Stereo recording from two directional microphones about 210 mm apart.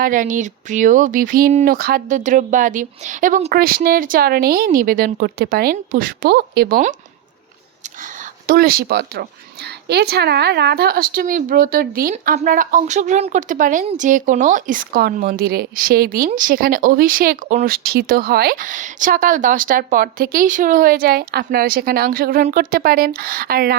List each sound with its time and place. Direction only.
0.0 s speech: 40° right (ahead or behind)
8.4 s speech: 45° right (ahead or behind)